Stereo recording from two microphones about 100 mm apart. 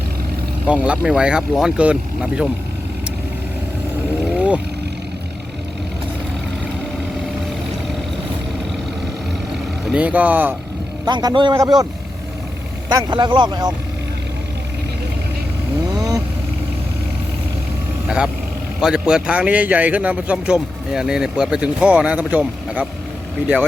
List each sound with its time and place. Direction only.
0.7 s a man's voice: 10° right (ahead or behind)
4.4 s vehicle: 15° right (ahead or behind)
9.9 s a man's voice: 15° right (ahead or behind)
11.0 s speech: 45° right (ahead or behind)
11.5 s speech: 35° right (ahead or behind)
12.9 s speech: 45° right (ahead or behind)
15.9 s vehicle: 40° right (ahead or behind)
18.8 s a man's voice: 5° right (ahead or behind)